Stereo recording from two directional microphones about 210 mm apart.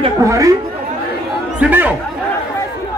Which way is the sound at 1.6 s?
10° right (ahead or behind).